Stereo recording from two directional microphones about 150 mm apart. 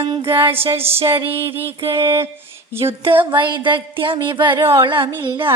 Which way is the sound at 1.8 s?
35° right (ahead or behind).